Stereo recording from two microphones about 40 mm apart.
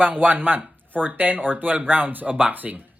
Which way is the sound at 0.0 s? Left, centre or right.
Right.